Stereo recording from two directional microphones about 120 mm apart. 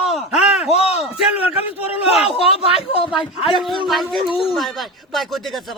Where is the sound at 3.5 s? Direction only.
Centre (ahead or behind).